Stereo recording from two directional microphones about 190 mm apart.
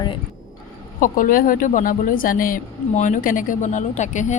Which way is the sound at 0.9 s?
45° left (ahead or behind).